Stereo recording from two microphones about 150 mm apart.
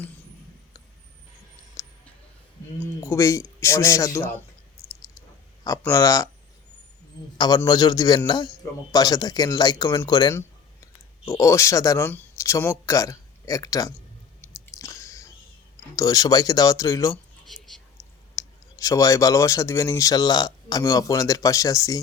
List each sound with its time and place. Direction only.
1.8 s a sound: 20° left (ahead or behind)
3.0 s speech: 20° left (ahead or behind)
5.6 s speech: 20° left (ahead or behind)
7.3 s speech: 25° left (ahead or behind)
14.8 s chewing: 20° left (ahead or behind)
16.0 s speech: 25° left (ahead or behind)
17.4 s whispering: centre (ahead or behind)
17.9 s speech: 20° left (ahead or behind)